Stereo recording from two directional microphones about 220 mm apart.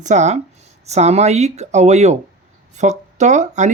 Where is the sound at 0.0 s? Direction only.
30° right (ahead or behind).